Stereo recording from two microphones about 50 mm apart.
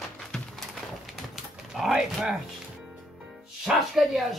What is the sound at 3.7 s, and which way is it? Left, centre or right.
Speech, centre.